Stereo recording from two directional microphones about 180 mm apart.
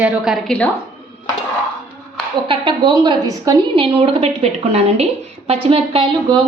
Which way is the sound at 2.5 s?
30° right (ahead or behind).